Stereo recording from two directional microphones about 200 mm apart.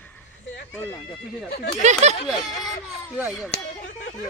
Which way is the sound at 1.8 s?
35° right (ahead or behind).